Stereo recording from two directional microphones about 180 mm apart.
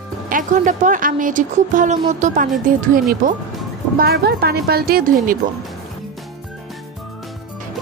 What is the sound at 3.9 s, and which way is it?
A woman's voice, 60° right (ahead or behind).